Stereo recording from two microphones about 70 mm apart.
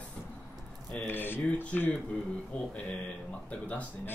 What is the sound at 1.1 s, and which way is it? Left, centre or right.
Speech, left.